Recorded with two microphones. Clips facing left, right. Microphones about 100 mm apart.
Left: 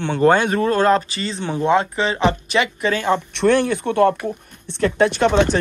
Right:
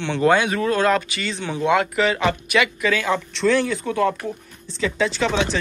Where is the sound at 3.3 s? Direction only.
55° left (ahead or behind).